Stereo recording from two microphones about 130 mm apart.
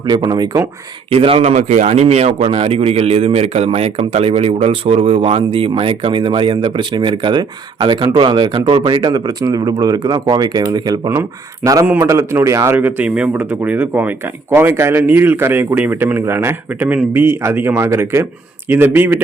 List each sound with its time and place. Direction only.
0.0 s a man's voice: 35° right (ahead or behind)
1.1 s speech: 45° right (ahead or behind)
1.5 s a man's voice: 65° right (ahead or behind); by 19.2 s 15° right (ahead or behind)